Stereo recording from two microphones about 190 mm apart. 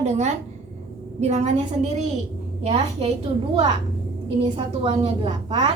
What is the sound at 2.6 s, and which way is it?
Speech, 35° right (ahead or behind).